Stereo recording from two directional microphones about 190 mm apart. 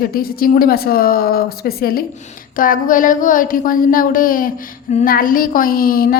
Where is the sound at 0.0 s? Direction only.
50° left (ahead or behind).